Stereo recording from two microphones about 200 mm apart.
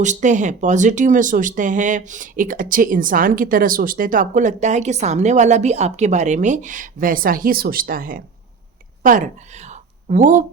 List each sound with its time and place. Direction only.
0.0 s a woman's voice: 40° right (ahead or behind)